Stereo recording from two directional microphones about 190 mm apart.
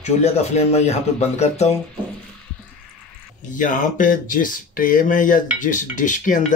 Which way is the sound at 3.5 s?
45° left (ahead or behind).